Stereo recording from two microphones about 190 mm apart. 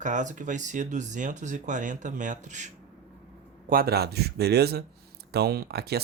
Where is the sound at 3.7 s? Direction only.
50° right (ahead or behind).